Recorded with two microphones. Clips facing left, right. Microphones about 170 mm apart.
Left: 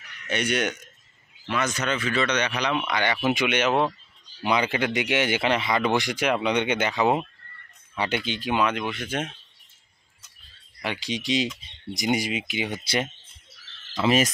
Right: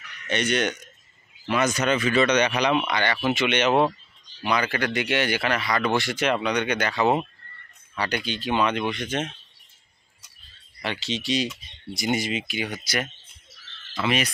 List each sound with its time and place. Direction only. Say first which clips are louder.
0.3 s speech: right 1 dB; 10° left (ahead or behind)
1.5 s speech: right 4 dB; 15° right (ahead or behind)
2.9 s speech: even; 5° left (ahead or behind)
4.4 s speech: left 1 dB; 20° left (ahead or behind)
6.4 s speech: left 1 dB; 20° left (ahead or behind)
8.3 s speech: right 2 dB; 10° left (ahead or behind)
10.8 s speech: even; 10° left (ahead or behind)
14.0 s speech: left 4 dB; 40° left (ahead or behind)